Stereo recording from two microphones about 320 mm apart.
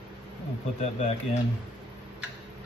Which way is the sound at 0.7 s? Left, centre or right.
Centre.